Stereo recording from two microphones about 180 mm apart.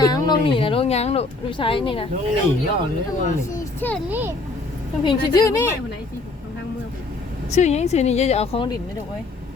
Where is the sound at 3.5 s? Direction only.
10° left (ahead or behind).